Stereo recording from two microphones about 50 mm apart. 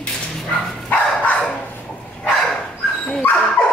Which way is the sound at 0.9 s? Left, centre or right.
Left.